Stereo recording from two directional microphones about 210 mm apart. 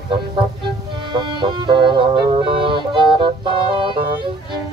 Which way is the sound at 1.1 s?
20° right (ahead or behind).